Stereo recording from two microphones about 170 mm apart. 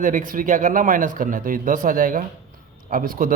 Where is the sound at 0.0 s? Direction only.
50° right (ahead or behind).